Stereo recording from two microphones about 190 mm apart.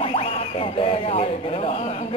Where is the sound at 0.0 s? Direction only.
30° left (ahead or behind).